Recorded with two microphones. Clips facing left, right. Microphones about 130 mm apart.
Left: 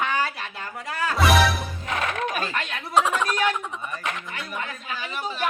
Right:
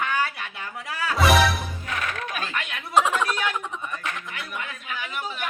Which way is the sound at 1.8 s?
25° left (ahead or behind).